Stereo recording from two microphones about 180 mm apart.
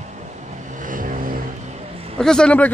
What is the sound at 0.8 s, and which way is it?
Vehicle, 50° right (ahead or behind).